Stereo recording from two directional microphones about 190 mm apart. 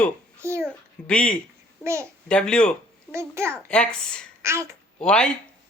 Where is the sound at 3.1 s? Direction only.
15° right (ahead or behind).